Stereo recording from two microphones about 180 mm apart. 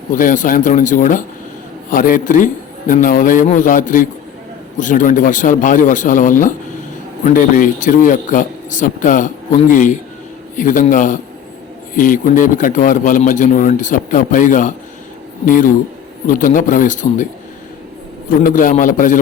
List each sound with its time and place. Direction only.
0.1 s a man's voice: 50° left (ahead or behind)
18.3 s a man's voice: 50° left (ahead or behind)